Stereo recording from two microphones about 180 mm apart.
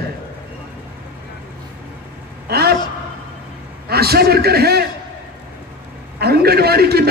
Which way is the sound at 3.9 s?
60° right (ahead or behind).